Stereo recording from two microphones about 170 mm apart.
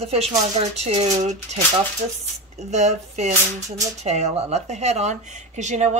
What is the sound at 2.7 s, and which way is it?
Speech, 40° right (ahead or behind).